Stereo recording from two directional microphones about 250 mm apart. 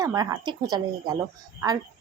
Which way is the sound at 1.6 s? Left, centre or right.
Centre.